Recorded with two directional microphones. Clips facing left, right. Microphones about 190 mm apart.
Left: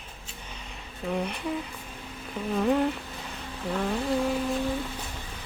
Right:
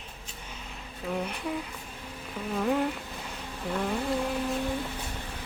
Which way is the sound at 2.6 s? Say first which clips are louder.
Left 3 dB; 5° right (ahead or behind).